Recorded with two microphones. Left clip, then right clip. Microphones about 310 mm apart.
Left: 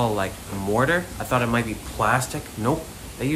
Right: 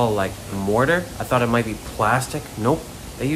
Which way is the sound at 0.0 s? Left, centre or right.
Centre.